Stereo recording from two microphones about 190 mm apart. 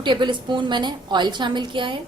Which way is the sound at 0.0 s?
25° right (ahead or behind).